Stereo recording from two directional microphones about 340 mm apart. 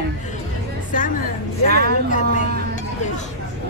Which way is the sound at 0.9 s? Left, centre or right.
Left.